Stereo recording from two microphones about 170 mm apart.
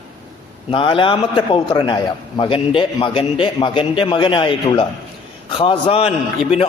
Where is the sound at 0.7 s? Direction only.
30° left (ahead or behind).